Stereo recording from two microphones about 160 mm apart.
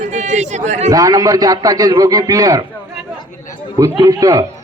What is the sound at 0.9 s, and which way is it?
A man's voice, 20° right (ahead or behind).